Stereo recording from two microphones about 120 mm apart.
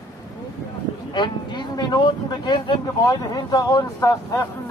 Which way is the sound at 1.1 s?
40° left (ahead or behind).